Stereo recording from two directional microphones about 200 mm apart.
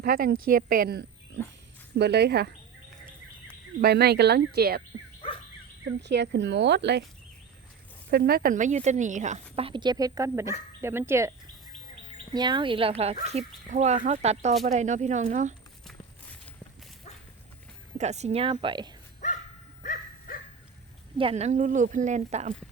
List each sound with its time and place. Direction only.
0.0 s speech: 50° right (ahead or behind)
3.8 s speech: 50° right (ahead or behind)
6.0 s speech: 55° right (ahead or behind)
8.1 s a woman's voice: 50° right (ahead or behind); by 11.3 s 10° right (ahead or behind)
12.3 s a woman's voice: 20° right (ahead or behind); by 15.5 s 40° right (ahead or behind)
17.9 s a woman's voice: 35° right (ahead or behind)
19.2 s dog: 40° left (ahead or behind)
19.8 s bow-wow: 45° left (ahead or behind)
21.2 s a woman's voice: 30° right (ahead or behind)